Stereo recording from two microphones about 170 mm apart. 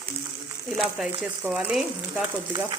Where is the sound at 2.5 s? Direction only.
25° right (ahead or behind).